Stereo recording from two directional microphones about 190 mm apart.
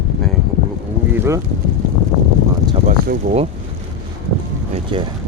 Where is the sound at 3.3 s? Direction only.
45° right (ahead or behind).